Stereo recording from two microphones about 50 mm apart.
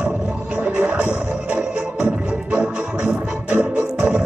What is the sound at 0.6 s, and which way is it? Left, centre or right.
Music, right.